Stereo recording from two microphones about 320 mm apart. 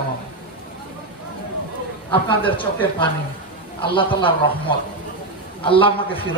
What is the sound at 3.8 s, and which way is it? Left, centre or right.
Speech, centre.